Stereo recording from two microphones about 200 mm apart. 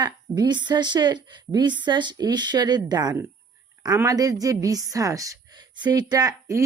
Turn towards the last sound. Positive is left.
turn(degrees=-20)  # may be behind; listen again after turning